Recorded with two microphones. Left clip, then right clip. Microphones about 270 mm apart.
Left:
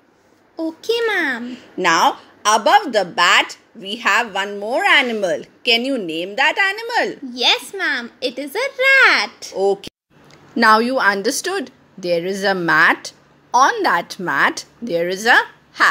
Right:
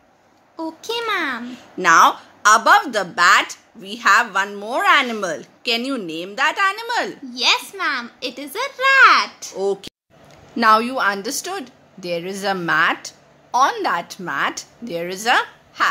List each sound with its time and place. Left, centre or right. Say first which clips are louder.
0.6 s a woman's voice: left 5 dB; centre
2.9 s speech: even; right
4.5 s a woman's voice: left 1 dB; centre